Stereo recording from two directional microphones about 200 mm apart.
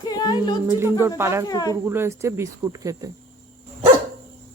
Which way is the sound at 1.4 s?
20° left (ahead or behind).